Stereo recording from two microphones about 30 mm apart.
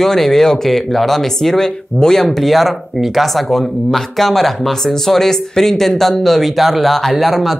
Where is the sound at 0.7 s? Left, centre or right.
Centre.